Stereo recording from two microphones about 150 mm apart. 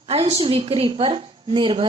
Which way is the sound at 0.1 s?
45° right (ahead or behind).